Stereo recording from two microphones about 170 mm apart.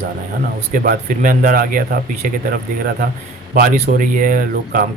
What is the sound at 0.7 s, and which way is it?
Speech, 55° right (ahead or behind).